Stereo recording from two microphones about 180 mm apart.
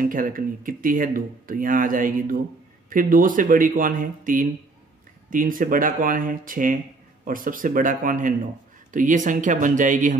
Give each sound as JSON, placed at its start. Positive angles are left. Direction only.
{"t": 0.0, "sound": "speech", "side_deg": -50}